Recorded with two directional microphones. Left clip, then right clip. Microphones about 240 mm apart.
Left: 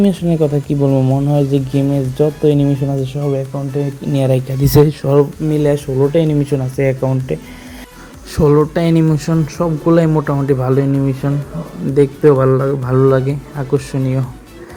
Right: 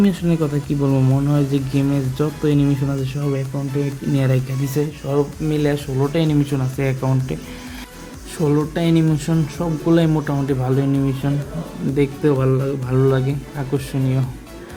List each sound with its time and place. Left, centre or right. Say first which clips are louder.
0.0 s speech: left 5 dB; centre
0.8 s speech: left 5 dB; centre
1.3 s speech: left 5 dB; centre
4.1 s speech: left 7 dB; centre
4.6 s speech: left 11 dB; left
5.1 s speech: left 5 dB; centre